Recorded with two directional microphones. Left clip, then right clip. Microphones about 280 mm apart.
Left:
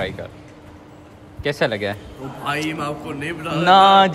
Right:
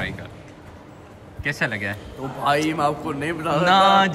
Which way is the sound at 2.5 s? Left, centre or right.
Centre.